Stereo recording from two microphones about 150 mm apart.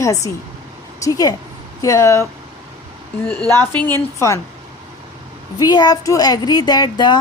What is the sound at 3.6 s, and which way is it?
Speech, 10° left (ahead or behind).